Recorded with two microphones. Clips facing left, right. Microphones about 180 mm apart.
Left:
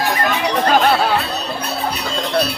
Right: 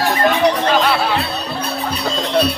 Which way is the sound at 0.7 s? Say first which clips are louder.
Left 1 dB; 45° left (ahead or behind).